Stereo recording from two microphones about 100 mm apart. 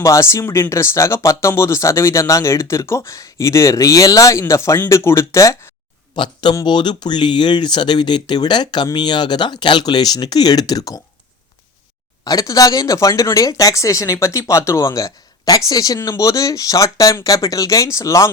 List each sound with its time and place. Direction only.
0.0 s speech: 30° left (ahead or behind)
6.1 s speech: 50° left (ahead or behind)
12.2 s speech: 35° left (ahead or behind)